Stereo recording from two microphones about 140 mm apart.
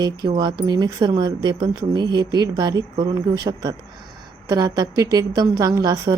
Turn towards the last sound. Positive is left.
turn(degrees=-25)  # may be behind; listen again after turning